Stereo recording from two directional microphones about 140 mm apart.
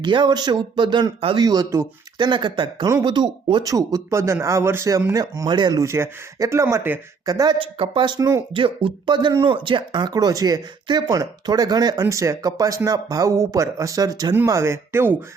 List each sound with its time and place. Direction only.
0.0 s speech: 35° right (ahead or behind)
7.6 s speech: 35° right (ahead or behind); by 15.1 s 20° right (ahead or behind)